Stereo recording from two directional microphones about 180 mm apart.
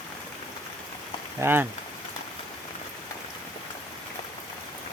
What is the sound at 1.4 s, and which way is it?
Speech, 10° right (ahead or behind).